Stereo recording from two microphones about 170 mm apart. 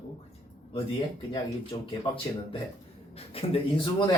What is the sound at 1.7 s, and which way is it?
Speech, 25° left (ahead or behind).